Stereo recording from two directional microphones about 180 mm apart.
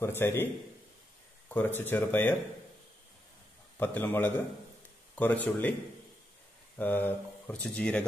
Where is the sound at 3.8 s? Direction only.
10° left (ahead or behind).